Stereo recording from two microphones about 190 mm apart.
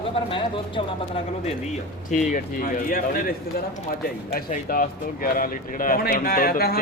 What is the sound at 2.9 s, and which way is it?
Speech, 50° left (ahead or behind).